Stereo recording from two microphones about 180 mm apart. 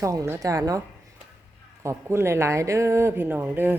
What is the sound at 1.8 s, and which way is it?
A woman's voice, 15° right (ahead or behind).